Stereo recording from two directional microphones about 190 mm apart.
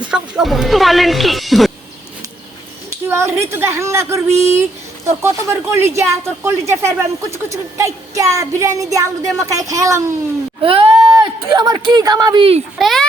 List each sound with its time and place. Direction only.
0.0 s speech: 5° right (ahead or behind)
3.1 s speech: 15° right (ahead or behind)
10.6 s speech: 30° right (ahead or behind)
12.8 s speech: centre (ahead or behind)